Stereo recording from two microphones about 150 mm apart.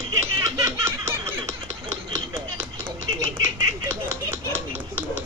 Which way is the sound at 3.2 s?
20° right (ahead or behind).